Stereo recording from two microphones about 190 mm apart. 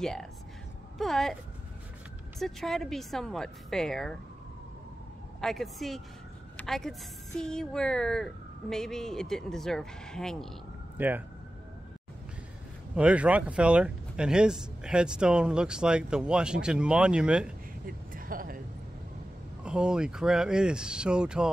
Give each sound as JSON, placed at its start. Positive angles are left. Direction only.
{"t": 0.0, "sound": "speech", "side_deg": 0}
{"t": 2.4, "sound": "speech", "side_deg": 0}
{"t": 5.4, "sound": "speech", "side_deg": 0}
{"t": 11.0, "sound": "speech", "side_deg": -10}
{"t": 12.9, "sound": "speech", "side_deg": -5}
{"t": 17.8, "sound": "a sound", "side_deg": -50}
{"t": 19.6, "sound": "speech", "side_deg": -5}